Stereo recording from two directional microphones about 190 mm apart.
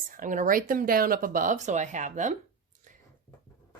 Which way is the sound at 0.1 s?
45° right (ahead or behind).